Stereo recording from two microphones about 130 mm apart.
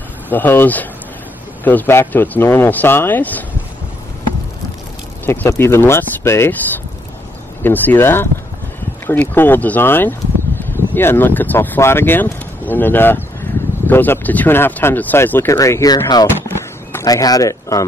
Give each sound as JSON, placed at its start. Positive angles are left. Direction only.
{"t": 0.3, "sound": "speech", "side_deg": 15}
{"t": 5.2, "sound": "speech", "side_deg": 15}
{"t": 7.6, "sound": "speech", "side_deg": 15}
{"t": 16.4, "sound": "a sound", "side_deg": 25}